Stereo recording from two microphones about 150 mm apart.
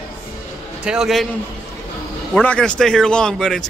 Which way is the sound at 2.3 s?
5° left (ahead or behind).